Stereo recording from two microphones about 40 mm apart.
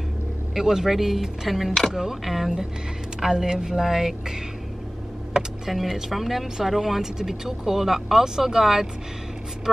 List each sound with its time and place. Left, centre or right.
0.6 s speech: centre
5.4 s speech: right
5.7 s speech: centre